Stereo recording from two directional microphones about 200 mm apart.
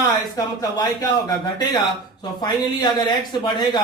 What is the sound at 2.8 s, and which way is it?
Speech, 20° left (ahead or behind).